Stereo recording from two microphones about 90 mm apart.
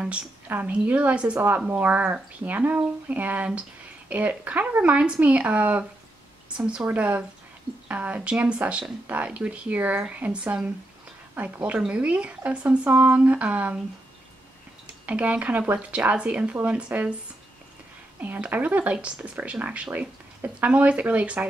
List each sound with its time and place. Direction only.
0.5 s speech: 20° right (ahead or behind)
15.0 s speech: 15° right (ahead or behind)
18.2 s speech: 20° right (ahead or behind)